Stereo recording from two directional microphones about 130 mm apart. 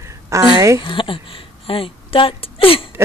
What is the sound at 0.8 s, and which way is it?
Speech, 40° left (ahead or behind).